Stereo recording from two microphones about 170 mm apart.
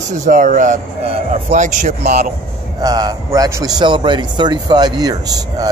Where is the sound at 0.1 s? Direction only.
50° right (ahead or behind).